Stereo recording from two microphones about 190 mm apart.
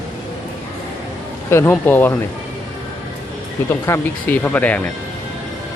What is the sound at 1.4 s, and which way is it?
Speech, 10° left (ahead or behind).